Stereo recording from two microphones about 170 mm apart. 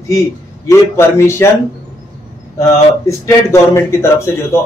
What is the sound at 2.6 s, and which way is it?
Speech, 15° left (ahead or behind).